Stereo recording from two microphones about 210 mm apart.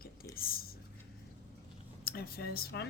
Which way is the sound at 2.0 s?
45° left (ahead or behind).